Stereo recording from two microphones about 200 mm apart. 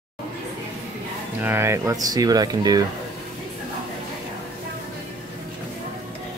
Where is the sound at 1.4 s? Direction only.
10° right (ahead or behind).